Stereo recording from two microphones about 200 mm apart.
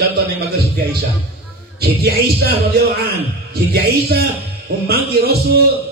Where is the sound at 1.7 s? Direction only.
50° right (ahead or behind).